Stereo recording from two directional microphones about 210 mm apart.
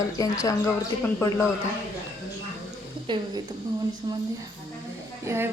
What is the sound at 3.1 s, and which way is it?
Speech, 20° right (ahead or behind).